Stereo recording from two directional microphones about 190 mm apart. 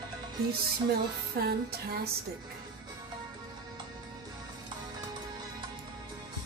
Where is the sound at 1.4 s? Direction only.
55° right (ahead or behind).